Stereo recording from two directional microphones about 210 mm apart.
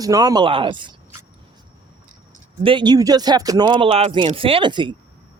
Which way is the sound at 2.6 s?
20° right (ahead or behind).